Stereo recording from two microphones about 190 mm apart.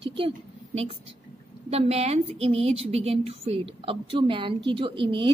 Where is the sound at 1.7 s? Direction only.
35° right (ahead or behind).